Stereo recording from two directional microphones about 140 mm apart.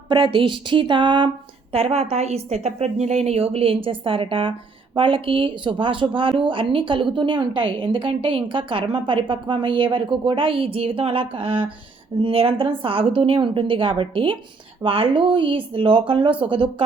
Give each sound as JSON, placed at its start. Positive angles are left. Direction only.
{"t": 0.1, "sound": "speech", "side_deg": -35}
{"t": 1.7, "sound": "a woman's voice", "side_deg": -45}